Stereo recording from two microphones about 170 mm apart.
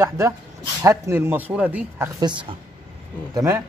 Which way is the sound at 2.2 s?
30° right (ahead or behind).